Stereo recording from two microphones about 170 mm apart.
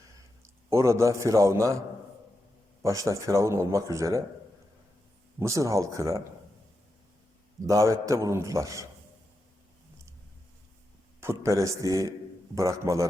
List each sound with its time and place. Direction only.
0.4 s a man's voice: 15° right (ahead or behind)
2.8 s speech: 20° right (ahead or behind)
5.4 s speech: 20° right (ahead or behind)
7.7 s speech: 20° right (ahead or behind)
11.2 s a man's voice: 15° right (ahead or behind)